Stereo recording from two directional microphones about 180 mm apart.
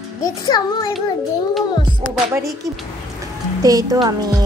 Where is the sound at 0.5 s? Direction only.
20° left (ahead or behind).